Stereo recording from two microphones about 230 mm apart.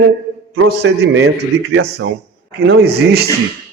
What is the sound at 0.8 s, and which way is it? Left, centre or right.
Speech, right.